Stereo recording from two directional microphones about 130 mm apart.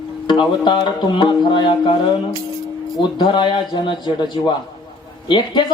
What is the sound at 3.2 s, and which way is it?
Speech, 35° left (ahead or behind).